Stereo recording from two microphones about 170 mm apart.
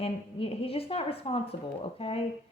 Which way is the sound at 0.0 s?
35° left (ahead or behind).